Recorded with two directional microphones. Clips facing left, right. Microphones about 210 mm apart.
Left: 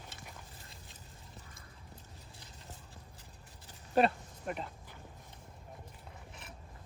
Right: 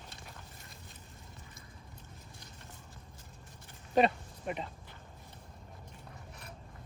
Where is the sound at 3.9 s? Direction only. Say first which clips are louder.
Right 1 dB; centre (ahead or behind).